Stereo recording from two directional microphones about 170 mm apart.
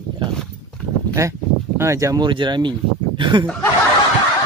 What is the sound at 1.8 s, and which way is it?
Speech, 15° right (ahead or behind).